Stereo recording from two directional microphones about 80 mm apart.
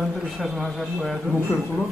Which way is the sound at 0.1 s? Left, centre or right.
Centre.